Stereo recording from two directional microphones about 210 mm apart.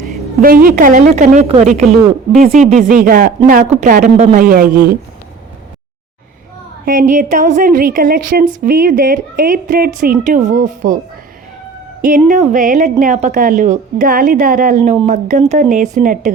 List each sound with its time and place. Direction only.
0.4 s a woman's voice: 45° right (ahead or behind)
6.8 s a woman's voice: 40° right (ahead or behind)
12.0 s a woman's voice: 40° right (ahead or behind)